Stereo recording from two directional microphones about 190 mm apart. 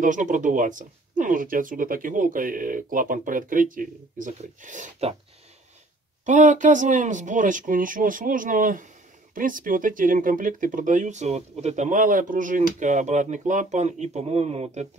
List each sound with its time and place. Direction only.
0.0 s speech: 40° right (ahead or behind)
6.2 s speech: 40° right (ahead or behind)